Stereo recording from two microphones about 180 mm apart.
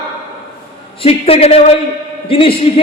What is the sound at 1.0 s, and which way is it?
A man's voice, 30° left (ahead or behind).